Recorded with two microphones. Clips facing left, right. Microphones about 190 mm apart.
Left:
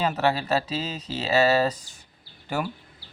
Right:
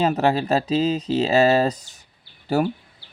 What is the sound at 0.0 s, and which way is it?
Speech, 40° right (ahead or behind).